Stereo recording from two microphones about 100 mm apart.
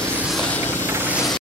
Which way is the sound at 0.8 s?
25° right (ahead or behind).